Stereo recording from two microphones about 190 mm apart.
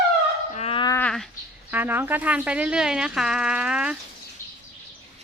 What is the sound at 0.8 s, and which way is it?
Speech, 10° left (ahead or behind).